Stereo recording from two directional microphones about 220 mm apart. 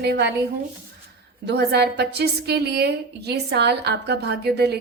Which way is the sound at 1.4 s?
50° right (ahead or behind).